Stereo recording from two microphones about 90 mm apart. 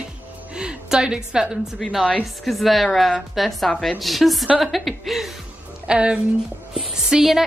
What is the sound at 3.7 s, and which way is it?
Speech, 15° left (ahead or behind).